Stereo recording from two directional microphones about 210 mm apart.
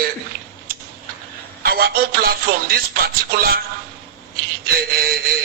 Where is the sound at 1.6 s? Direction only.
45° right (ahead or behind).